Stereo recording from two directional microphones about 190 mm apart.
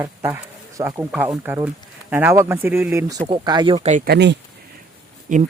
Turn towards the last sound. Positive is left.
turn(degrees=-40)  # may be behind; listen again after turning